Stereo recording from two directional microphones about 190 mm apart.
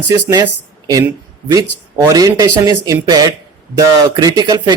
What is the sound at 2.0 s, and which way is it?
Speech, 20° right (ahead or behind).